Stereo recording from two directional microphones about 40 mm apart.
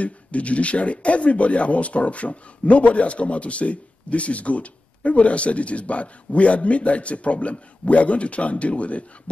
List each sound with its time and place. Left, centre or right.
0.0 s speech: left